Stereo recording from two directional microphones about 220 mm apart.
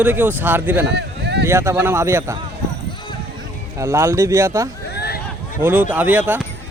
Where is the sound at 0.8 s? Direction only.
50° right (ahead or behind).